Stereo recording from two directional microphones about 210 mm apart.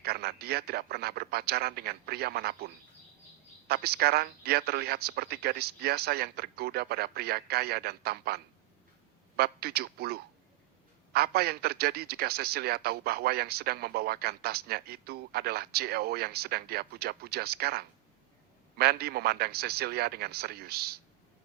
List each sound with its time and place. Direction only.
0.0 s a man's voice: 50° right (ahead or behind)